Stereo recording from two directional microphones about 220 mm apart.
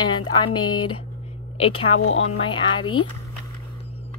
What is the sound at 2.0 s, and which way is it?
Speech, 65° left (ahead or behind).